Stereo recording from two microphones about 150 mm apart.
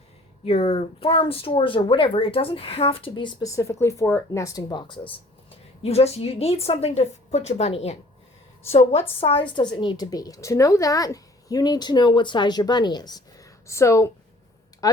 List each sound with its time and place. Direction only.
0.4 s a woman's voice: 40° left (ahead or behind); by 14.1 s 20° left (ahead or behind)